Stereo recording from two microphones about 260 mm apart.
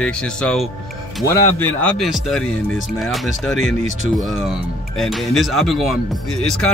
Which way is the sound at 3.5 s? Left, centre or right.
Left.